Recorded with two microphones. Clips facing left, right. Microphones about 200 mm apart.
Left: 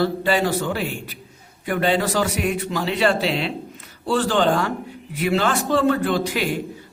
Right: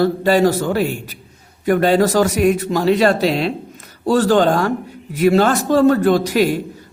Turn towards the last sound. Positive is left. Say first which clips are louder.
# right 7 dB
turn(degrees=-40)  # may be behind; listen again after turning